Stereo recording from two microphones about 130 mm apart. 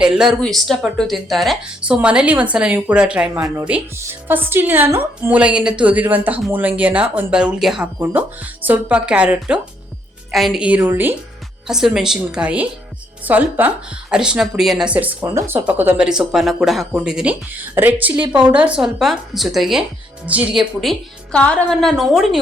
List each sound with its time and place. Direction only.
0.0 s a woman's voice: 5° right (ahead or behind)
3.4 s speech: 30° right (ahead or behind)
3.9 s a woman's voice: 15° right (ahead or behind)
11.7 s a woman's voice: 5° right (ahead or behind)
21.3 s speech: 10° left (ahead or behind)